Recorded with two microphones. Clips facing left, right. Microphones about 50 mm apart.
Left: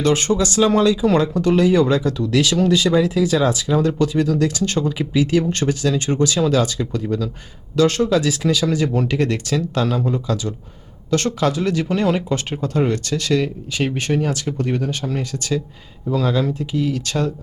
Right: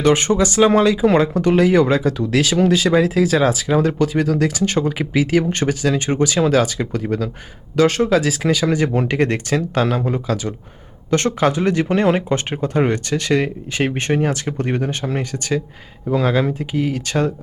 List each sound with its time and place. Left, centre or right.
0.0 s speech: right
10.0 s speech: centre
11.3 s speech: right